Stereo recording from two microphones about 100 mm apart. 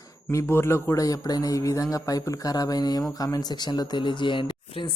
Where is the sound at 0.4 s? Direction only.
25° left (ahead or behind).